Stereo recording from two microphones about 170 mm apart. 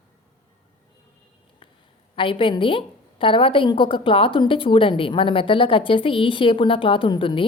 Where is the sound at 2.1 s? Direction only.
30° left (ahead or behind).